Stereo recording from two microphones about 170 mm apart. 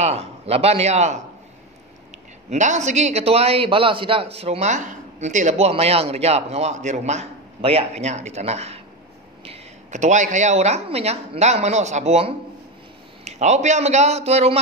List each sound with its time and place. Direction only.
0.0 s a man's voice: 40° right (ahead or behind)
2.5 s a man's voice: 45° right (ahead or behind)